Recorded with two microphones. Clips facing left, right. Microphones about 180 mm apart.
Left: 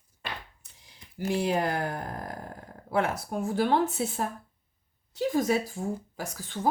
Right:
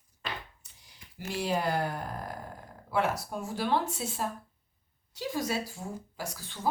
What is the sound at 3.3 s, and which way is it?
A woman's voice, 55° left (ahead or behind).